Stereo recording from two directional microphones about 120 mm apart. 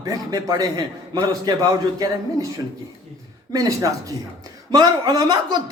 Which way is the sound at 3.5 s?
30° right (ahead or behind).